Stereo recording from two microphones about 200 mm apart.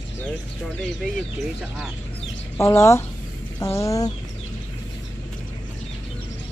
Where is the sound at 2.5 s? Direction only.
15° left (ahead or behind).